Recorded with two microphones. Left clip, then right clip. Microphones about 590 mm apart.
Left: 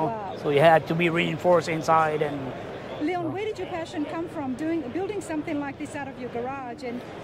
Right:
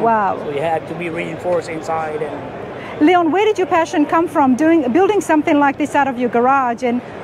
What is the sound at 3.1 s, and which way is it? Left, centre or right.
Speech, right.